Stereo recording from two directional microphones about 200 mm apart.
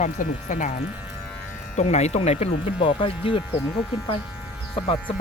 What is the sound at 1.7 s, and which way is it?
Speech, 35° left (ahead or behind).